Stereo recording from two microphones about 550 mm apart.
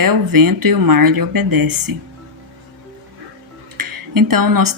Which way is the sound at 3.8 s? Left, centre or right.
Right.